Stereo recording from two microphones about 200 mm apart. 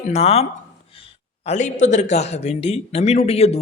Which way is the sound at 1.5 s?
40° left (ahead or behind).